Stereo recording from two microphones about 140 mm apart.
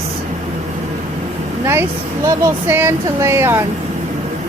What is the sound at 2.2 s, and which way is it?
Speech, 20° right (ahead or behind).